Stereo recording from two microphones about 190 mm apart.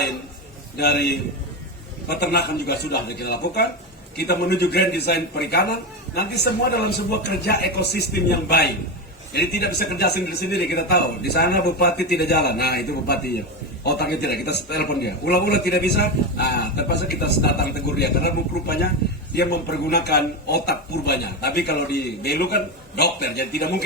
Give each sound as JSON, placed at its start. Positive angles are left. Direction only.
{"t": 0.8, "sound": "a man's voice", "side_deg": 60}